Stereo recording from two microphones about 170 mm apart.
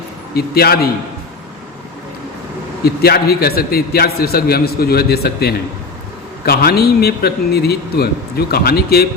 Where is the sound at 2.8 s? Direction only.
70° left (ahead or behind).